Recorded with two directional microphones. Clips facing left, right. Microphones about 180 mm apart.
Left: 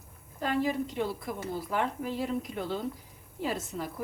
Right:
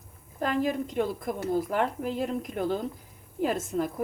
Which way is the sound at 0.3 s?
50° right (ahead or behind).